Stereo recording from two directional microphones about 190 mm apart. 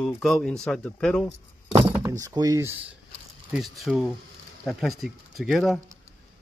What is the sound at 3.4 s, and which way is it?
Speech, centre (ahead or behind).